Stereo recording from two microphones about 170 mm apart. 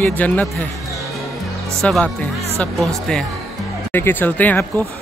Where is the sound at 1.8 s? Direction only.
5° left (ahead or behind).